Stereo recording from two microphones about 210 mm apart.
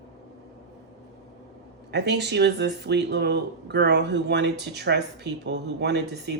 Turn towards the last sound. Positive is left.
turn(degrees=-55)  # may be behind; listen again after turning